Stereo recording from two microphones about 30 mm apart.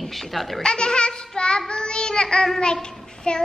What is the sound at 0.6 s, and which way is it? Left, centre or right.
Child singing, left.